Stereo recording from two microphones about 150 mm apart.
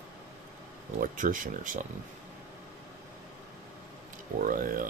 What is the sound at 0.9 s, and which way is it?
Speech, 60° right (ahead or behind).